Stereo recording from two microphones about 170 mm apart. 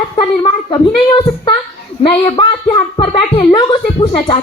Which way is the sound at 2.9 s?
30° left (ahead or behind).